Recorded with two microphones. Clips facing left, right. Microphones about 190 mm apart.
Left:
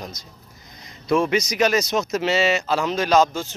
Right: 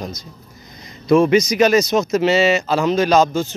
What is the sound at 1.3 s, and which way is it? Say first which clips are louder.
Speech: right 6 dB; 5° right (ahead or behind).